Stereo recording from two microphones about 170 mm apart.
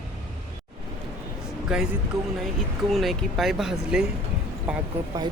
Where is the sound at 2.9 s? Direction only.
Centre (ahead or behind).